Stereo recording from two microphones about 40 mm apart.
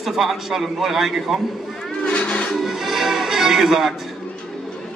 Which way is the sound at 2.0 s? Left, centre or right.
Left.